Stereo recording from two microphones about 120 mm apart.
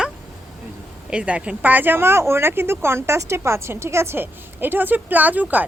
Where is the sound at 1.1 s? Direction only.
10° right (ahead or behind).